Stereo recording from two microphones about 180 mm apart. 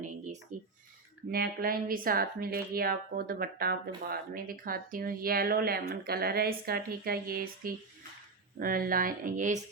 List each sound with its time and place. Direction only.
0.5 s speech: 45° right (ahead or behind)
1.3 s speech: 55° right (ahead or behind)